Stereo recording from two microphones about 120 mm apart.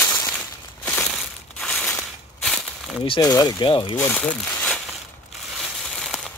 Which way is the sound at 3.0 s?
35° left (ahead or behind).